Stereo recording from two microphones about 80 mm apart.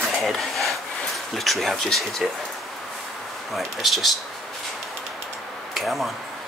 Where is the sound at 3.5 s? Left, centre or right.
Centre.